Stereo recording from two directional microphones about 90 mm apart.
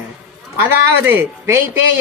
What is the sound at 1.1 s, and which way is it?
Speech, 25° right (ahead or behind).